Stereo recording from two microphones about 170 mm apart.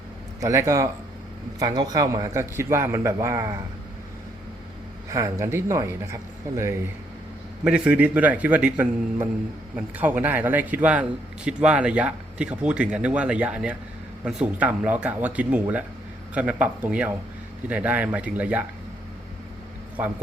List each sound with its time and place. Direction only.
0.3 s a man's voice: 15° right (ahead or behind)
5.1 s a man's voice: 15° right (ahead or behind)